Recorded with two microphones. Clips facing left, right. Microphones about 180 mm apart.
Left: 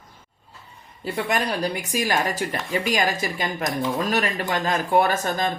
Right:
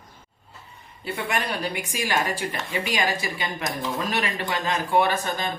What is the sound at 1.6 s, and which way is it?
Speech, 40° left (ahead or behind).